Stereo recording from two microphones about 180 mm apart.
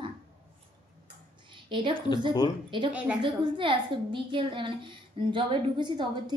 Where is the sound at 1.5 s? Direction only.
25° right (ahead or behind).